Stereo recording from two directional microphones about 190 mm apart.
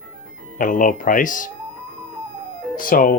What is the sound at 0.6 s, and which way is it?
Speech, 45° left (ahead or behind).